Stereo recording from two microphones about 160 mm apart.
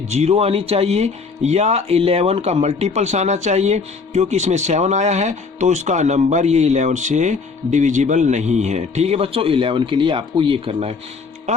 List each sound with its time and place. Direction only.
0.1 s speech: 40° right (ahead or behind)